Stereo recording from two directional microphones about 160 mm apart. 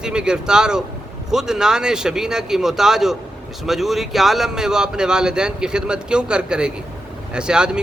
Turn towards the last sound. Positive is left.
turn(degrees=-5)  # may be behind; listen again after turning